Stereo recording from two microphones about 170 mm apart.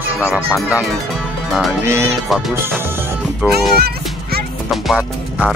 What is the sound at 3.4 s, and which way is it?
Speech, 10° right (ahead or behind).